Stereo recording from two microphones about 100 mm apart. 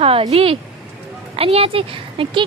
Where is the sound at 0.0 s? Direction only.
75° right (ahead or behind).